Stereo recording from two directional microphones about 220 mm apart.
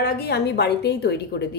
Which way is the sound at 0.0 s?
45° left (ahead or behind).